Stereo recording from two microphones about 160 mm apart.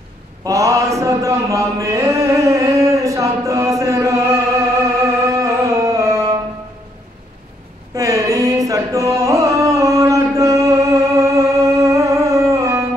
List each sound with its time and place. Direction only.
0.4 s mantra: 20° right (ahead or behind)
7.9 s carnatic music: 20° right (ahead or behind)